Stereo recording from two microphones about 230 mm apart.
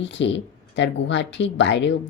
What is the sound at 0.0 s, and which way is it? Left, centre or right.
Speech, left.